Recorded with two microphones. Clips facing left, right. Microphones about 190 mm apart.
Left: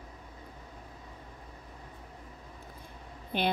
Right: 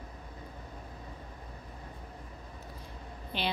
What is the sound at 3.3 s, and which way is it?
Speech, 50° left (ahead or behind).